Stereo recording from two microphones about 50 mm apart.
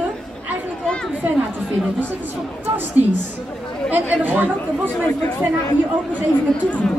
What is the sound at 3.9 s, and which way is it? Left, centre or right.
Speech, right.